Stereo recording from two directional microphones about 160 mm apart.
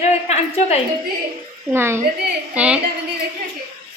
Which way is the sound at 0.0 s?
45° left (ahead or behind).